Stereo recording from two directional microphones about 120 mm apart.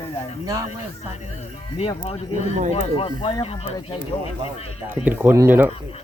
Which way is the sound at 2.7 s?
50° left (ahead or behind).